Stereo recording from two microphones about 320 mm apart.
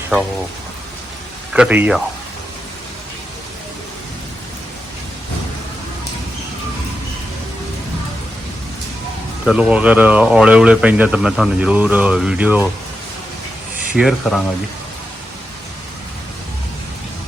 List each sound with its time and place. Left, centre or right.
1.5 s speech: centre
9.5 s speech: centre
13.9 s speech: centre